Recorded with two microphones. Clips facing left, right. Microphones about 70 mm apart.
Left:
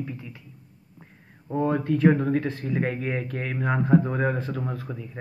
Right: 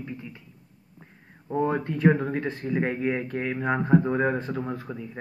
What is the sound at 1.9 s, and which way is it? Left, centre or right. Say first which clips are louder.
Speech: left 4 dB; centre.